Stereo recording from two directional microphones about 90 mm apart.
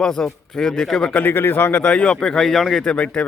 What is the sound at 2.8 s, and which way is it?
Speech, 15° left (ahead or behind).